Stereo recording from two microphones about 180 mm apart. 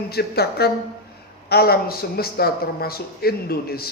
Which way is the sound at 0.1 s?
60° left (ahead or behind).